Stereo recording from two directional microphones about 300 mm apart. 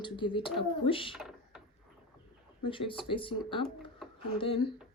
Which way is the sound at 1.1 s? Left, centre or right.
Centre.